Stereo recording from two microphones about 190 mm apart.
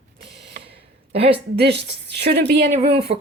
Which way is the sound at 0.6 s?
30° right (ahead or behind).